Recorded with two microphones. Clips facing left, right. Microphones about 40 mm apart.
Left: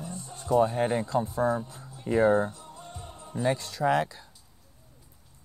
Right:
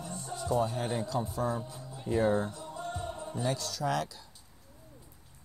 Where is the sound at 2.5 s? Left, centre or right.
Right.